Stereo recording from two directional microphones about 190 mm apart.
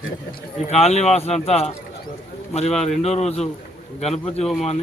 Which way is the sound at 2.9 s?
35° left (ahead or behind).